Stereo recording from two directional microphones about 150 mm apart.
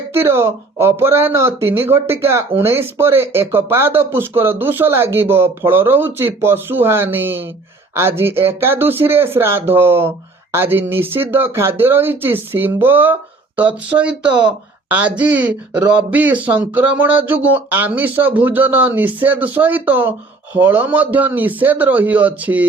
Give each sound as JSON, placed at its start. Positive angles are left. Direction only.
{"t": 0.1, "sound": "speech", "side_deg": -15}